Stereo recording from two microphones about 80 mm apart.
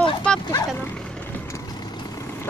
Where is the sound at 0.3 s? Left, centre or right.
Centre.